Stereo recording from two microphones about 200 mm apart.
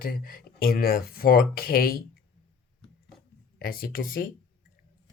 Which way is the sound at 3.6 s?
45° left (ahead or behind).